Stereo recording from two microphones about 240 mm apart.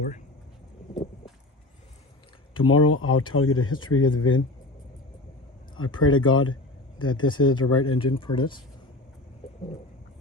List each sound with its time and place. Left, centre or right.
2.6 s speech: left
5.7 s speech: left
7.9 s speech: left